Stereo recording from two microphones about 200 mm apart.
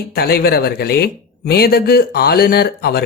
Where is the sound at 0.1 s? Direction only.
50° left (ahead or behind).